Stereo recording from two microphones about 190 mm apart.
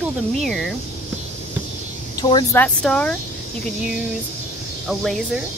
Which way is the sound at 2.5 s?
5° left (ahead or behind).